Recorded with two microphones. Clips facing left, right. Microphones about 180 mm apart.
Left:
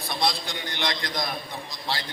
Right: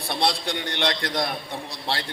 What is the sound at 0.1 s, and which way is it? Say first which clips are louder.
A man's voice: right 3 dB; 65° right (ahead or behind).